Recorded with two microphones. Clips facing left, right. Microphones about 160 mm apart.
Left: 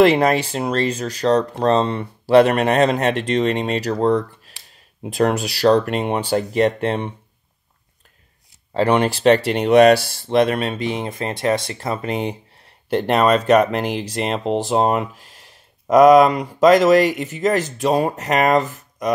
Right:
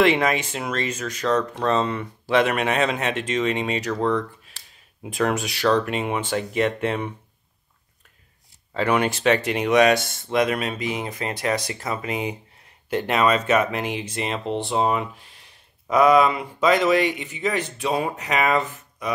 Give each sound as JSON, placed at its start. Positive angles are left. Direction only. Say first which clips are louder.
{"t": 0.0, "sound": "speech", "louder": "left 5 dB", "side_deg": 35}
{"t": 8.7, "sound": "speech", "louder": "left 4 dB", "side_deg": 35}
{"t": 13.7, "sound": "speech", "louder": "left 5 dB", "side_deg": 0}
{"t": 14.4, "sound": "speech", "louder": "left 5 dB", "side_deg": 40}